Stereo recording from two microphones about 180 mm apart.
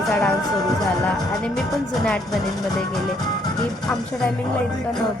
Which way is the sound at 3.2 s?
25° left (ahead or behind).